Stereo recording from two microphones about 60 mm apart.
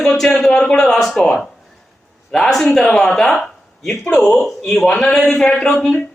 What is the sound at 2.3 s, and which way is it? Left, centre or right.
Speech, centre.